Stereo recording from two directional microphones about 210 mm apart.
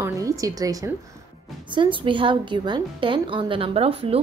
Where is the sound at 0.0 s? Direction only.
15° right (ahead or behind).